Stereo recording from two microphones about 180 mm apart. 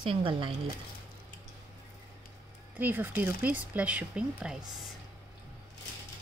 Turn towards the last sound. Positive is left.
turn(degrees=-5)  # may be behind; listen again after turning